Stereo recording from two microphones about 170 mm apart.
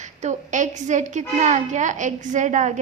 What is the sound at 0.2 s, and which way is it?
A woman's voice, 45° right (ahead or behind).